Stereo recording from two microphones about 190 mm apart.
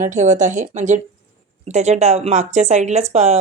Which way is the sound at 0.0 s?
40° right (ahead or behind).